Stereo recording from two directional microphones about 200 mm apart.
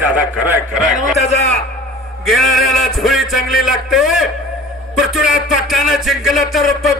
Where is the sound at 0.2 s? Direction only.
5° right (ahead or behind).